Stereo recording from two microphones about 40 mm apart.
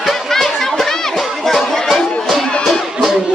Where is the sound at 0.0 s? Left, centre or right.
Centre.